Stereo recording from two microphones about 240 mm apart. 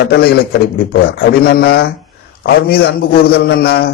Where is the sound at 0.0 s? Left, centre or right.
Left.